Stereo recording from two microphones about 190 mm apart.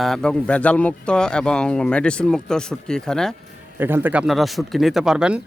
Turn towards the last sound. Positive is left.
turn(degrees=-5)  # may be behind; listen again after turning